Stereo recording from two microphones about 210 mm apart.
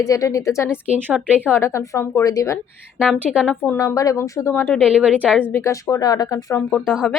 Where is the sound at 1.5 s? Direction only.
10° left (ahead or behind).